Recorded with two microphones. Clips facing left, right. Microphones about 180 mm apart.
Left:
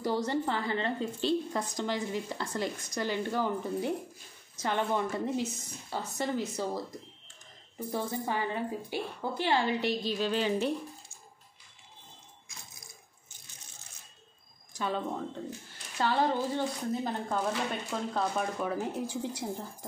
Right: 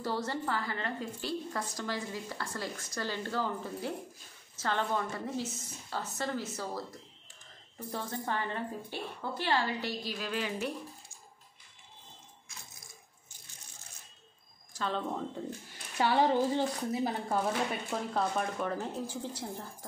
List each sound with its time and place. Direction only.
0.0 s a woman's voice: 15° left (ahead or behind)
7.9 s speech: 10° left (ahead or behind); by 11.1 s 25° left (ahead or behind)
14.7 s speech: 10° left (ahead or behind)
15.7 s speech: 15° right (ahead or behind); by 19.5 s 15° left (ahead or behind)